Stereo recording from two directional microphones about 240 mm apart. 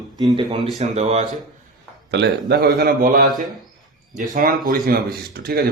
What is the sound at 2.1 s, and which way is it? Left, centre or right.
A man's voice, right.